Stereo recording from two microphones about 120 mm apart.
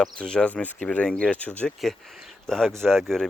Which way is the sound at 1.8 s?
Centre (ahead or behind).